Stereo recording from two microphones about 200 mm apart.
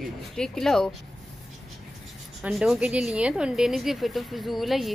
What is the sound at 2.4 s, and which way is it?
A woman's voice, 5° right (ahead or behind).